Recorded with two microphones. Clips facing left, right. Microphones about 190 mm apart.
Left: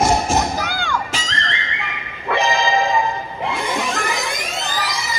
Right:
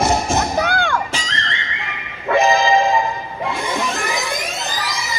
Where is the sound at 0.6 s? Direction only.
60° right (ahead or behind).